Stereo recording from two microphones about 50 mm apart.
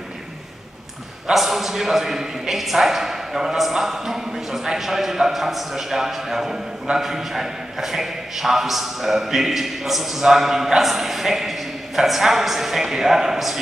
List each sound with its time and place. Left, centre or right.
1.3 s a man's voice: centre